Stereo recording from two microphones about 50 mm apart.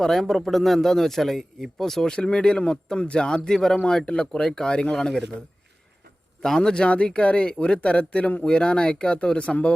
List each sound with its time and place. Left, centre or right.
0.0 s speech: centre
6.6 s speech: centre